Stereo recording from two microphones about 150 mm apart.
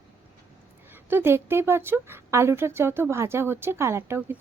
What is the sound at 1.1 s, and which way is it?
A woman's voice, 15° right (ahead or behind).